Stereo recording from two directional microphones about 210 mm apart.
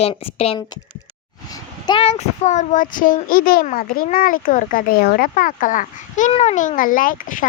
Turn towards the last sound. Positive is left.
turn(degrees=40)  # may be behind; listen again after turning